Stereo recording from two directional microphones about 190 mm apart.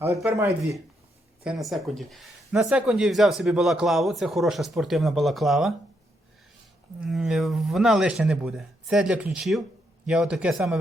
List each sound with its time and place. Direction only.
0.0 s speech: 15° right (ahead or behind)
1.5 s speech: centre (ahead or behind)
7.0 s speech: centre (ahead or behind)